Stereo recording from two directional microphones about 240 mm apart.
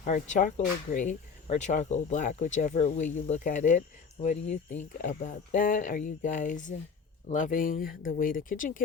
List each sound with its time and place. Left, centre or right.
0.0 s speech: left